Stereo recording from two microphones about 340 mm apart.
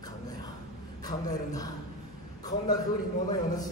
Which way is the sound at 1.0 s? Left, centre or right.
Centre.